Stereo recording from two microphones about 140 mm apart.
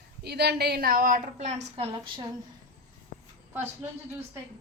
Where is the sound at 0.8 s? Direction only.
90° right; by 2.2 s 35° right (ahead or behind).